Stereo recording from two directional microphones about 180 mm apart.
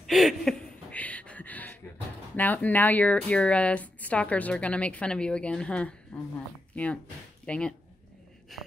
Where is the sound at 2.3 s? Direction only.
10° left (ahead or behind).